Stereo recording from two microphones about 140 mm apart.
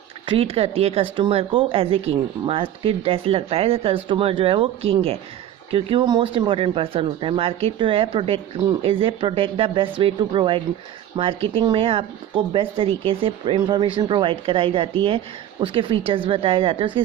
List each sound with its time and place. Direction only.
0.3 s speech: 45° right (ahead or behind)